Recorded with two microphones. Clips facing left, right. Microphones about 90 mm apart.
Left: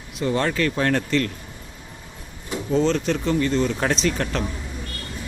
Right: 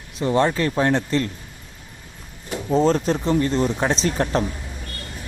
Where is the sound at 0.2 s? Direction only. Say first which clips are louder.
Right 3 dB; 30° right (ahead or behind).